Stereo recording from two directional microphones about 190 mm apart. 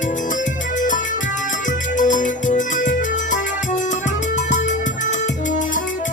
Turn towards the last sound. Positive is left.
turn(degrees=45)  # may be behind; listen again after turning